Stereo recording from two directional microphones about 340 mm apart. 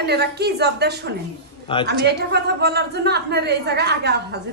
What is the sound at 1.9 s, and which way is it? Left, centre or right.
A woman's voice, right.